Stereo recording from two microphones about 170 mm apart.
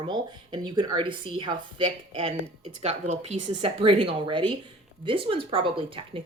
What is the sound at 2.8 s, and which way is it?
Speech, 45° right (ahead or behind).